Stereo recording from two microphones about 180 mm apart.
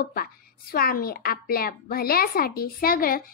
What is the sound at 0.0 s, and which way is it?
A woman's voice, 55° left (ahead or behind).